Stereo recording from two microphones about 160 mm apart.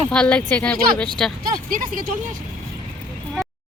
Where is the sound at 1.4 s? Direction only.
60° right (ahead or behind).